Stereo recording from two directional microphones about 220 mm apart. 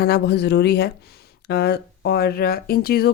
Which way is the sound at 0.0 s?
45° left (ahead or behind).